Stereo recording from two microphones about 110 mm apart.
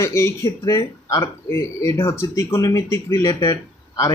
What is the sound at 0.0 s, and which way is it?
Speech, 25° left (ahead or behind).